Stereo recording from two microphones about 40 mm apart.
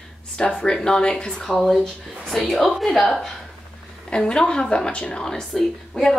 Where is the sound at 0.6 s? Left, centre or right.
Centre.